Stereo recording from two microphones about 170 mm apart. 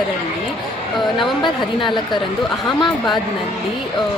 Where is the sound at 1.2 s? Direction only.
30° left (ahead or behind).